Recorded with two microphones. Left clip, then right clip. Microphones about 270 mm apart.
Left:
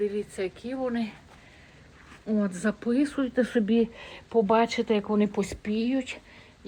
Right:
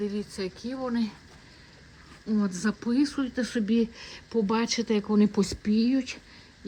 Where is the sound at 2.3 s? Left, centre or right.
Centre.